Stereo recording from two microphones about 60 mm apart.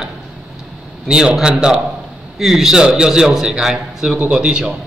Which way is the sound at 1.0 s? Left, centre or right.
Centre.